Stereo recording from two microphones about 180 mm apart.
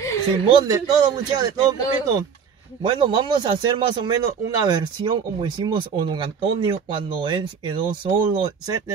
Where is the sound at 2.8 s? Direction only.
25° right (ahead or behind).